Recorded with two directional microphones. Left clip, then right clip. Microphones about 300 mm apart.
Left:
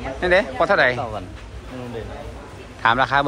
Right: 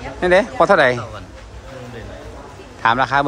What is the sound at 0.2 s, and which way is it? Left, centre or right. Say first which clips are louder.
Speech: right 4 dB; centre.